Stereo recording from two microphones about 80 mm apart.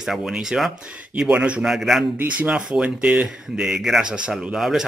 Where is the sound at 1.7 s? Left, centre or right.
Centre.